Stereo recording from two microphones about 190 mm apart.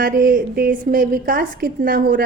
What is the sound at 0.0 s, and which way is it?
A woman's voice, 45° right (ahead or behind).